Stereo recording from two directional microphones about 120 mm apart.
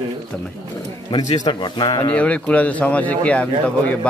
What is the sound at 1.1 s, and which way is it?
Speech, 40° left (ahead or behind).